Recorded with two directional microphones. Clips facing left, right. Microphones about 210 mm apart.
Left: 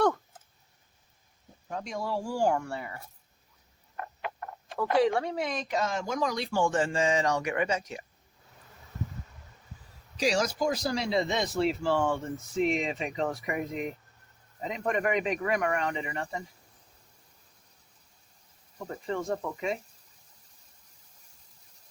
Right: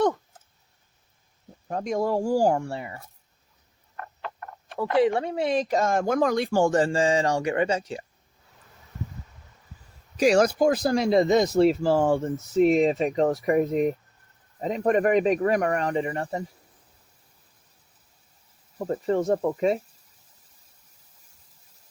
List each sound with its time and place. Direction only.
1.6 s speech: 45° right (ahead or behind); by 3.0 s 25° right (ahead or behind)
3.9 s frog: 15° left (ahead or behind)
4.9 s speech: 20° right (ahead or behind)
10.2 s speech: 55° right (ahead or behind); by 16.4 s 40° right (ahead or behind)
18.8 s speech: 40° right (ahead or behind)